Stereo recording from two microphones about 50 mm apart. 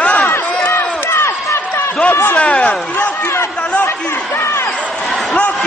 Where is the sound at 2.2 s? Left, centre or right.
Left.